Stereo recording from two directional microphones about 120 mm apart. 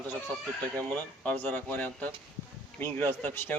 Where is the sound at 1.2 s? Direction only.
15° left (ahead or behind).